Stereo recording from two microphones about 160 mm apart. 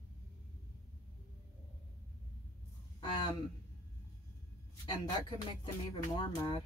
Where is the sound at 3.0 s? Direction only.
30° left (ahead or behind).